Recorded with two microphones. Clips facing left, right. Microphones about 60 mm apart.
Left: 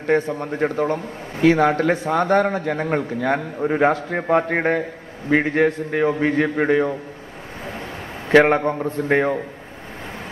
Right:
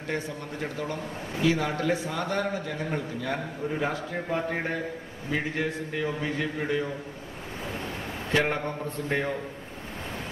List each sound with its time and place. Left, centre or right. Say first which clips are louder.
0.0 s a man's voice: left 12 dB; left
8.3 s a man's voice: left 12 dB; left